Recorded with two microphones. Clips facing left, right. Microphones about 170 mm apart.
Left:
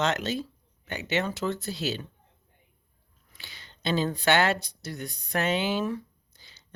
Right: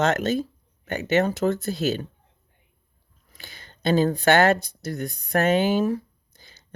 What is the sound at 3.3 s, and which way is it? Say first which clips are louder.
Speech: right 4 dB; 50° right (ahead or behind).